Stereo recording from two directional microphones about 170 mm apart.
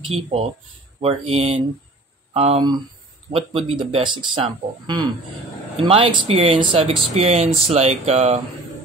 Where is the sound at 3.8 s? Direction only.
30° right (ahead or behind).